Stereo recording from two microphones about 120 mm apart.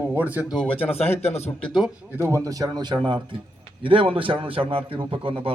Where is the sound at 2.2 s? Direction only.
20° right (ahead or behind).